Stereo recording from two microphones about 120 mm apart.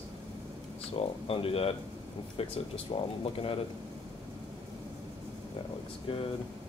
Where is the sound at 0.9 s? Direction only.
50° left (ahead or behind).